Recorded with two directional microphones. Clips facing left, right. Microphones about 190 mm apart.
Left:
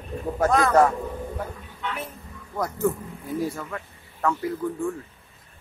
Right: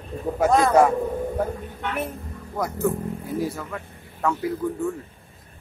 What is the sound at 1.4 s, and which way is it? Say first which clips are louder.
Music: right 7 dB; 55° right (ahead or behind).